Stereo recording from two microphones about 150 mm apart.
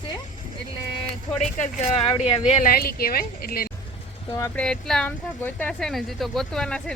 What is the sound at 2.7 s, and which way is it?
Speech, 85° left.